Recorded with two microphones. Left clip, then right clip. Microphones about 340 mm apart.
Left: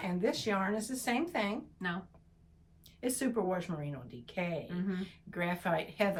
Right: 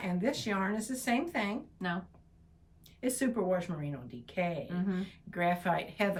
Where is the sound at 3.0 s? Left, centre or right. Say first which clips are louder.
Right 1 dB; centre.